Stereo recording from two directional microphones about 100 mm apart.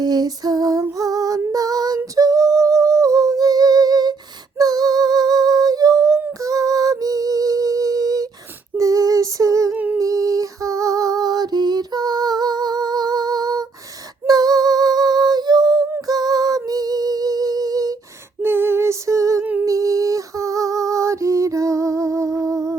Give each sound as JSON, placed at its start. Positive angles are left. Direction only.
{"t": 0.0, "sound": "female singing", "side_deg": -40}
{"t": 0.9, "sound": "music", "side_deg": -35}
{"t": 2.1, "sound": "humming", "side_deg": -35}
{"t": 4.5, "sound": "female singing", "side_deg": -40}
{"t": 6.4, "sound": "music", "side_deg": -35}
{"t": 8.8, "sound": "female singing", "side_deg": -35}
{"t": 9.7, "sound": "humming", "side_deg": -15}
{"t": 10.0, "sound": "female singing", "side_deg": -35}
{"t": 14.3, "sound": "a sound", "side_deg": -40}
{"t": 18.4, "sound": "a sound", "side_deg": -25}
{"t": 19.6, "sound": "female singing", "side_deg": -35}